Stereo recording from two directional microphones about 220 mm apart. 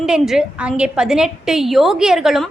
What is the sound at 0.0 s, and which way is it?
A woman's voice, 5° right (ahead or behind).